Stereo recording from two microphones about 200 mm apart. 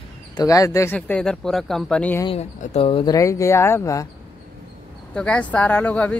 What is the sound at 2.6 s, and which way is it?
Speech, 30° left (ahead or behind).